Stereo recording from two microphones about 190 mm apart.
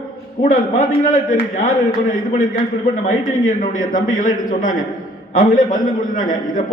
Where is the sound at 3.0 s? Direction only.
45° left (ahead or behind).